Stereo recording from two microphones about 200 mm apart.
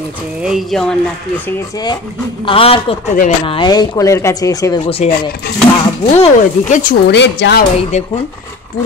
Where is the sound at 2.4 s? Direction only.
30° left (ahead or behind).